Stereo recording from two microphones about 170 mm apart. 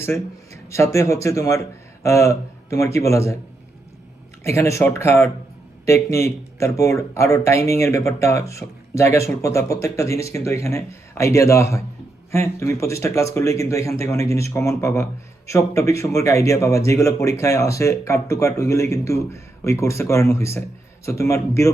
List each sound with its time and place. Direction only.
0.7 s speech: 15° left (ahead or behind)
4.4 s speech: 15° left (ahead or behind)